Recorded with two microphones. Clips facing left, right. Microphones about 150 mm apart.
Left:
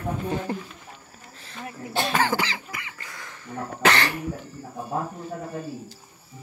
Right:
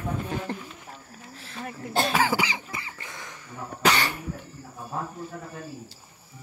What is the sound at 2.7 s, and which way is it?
Cough, 30° right (ahead or behind).